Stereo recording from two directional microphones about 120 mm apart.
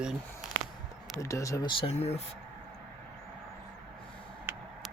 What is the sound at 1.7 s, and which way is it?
Speech, 45° left (ahead or behind).